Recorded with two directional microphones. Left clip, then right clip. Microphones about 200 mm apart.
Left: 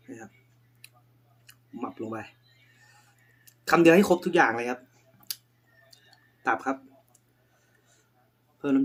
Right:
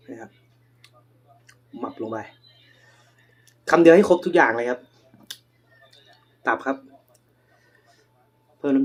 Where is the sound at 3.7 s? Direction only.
15° left (ahead or behind).